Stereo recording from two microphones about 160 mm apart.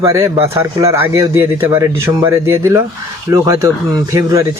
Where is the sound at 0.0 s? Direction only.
20° right (ahead or behind).